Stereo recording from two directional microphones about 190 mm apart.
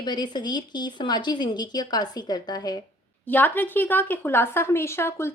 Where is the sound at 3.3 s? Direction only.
10° left (ahead or behind).